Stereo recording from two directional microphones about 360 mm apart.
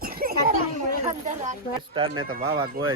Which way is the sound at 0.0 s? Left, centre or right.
Right.